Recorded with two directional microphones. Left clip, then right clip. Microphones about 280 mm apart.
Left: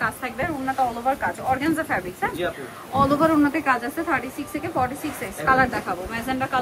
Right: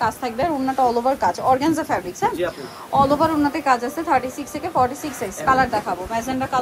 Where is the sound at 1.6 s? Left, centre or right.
Centre.